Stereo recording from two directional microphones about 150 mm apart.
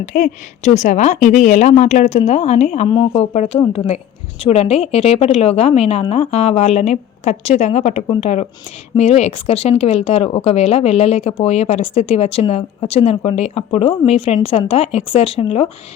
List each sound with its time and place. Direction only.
0.1 s speech: 50° left (ahead or behind)